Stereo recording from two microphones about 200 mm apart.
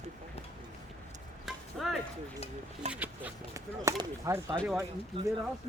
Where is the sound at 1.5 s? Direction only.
Centre (ahead or behind).